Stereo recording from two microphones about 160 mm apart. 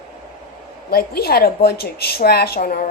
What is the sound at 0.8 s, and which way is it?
A woman's voice, 75° left (ahead or behind).